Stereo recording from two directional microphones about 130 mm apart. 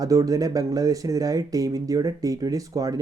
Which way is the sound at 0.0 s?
25° right (ahead or behind).